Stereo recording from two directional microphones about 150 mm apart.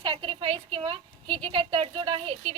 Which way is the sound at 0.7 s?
30° right (ahead or behind).